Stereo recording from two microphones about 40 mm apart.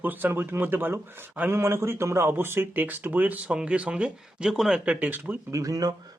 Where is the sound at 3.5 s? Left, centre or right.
Right.